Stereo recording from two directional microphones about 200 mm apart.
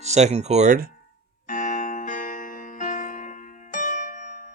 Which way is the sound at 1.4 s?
40° left (ahead or behind).